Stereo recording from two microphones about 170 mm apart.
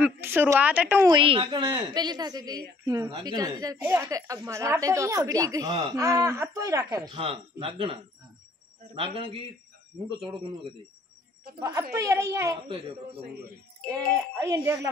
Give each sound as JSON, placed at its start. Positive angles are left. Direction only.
{"t": 0.0, "sound": "speech", "side_deg": -10}
{"t": 1.1, "sound": "a woman's voice", "side_deg": -30}
{"t": 3.7, "sound": "a woman's voice", "side_deg": -10}
{"t": 7.1, "sound": "a woman's voice", "side_deg": -30}
{"t": 11.9, "sound": "a woman's voice", "side_deg": -20}
{"t": 13.9, "sound": "a woman's voice", "side_deg": -20}